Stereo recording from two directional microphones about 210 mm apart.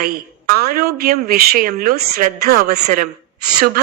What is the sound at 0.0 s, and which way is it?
A woman's voice, 45° right (ahead or behind).